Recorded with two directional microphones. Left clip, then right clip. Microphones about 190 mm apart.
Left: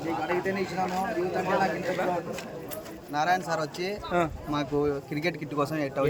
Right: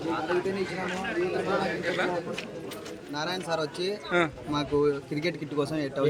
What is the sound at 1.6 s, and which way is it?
Speech, 5° left (ahead or behind).